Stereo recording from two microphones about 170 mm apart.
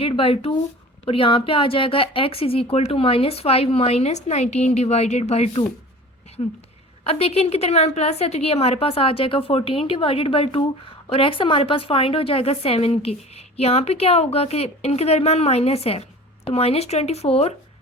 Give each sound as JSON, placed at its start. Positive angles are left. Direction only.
{"t": 0.0, "sound": "a woman's voice", "side_deg": 35}